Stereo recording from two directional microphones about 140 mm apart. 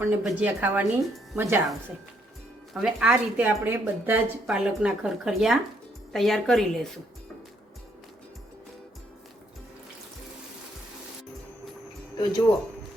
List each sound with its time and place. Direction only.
0.2 s speech: centre (ahead or behind)
0.4 s speech: 10° right (ahead or behind)
2.7 s speech: 5° right (ahead or behind)
12.1 s speech: 30° left (ahead or behind)